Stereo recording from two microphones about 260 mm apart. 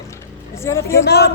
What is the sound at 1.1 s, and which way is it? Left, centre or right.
Speech, left.